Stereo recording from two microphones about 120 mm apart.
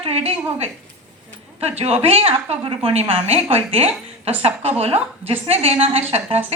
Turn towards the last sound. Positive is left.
turn(degrees=-60)  # may be behind; listen again after turning